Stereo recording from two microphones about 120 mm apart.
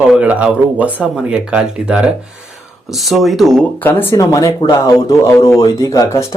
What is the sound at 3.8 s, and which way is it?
Speech, 20° left (ahead or behind).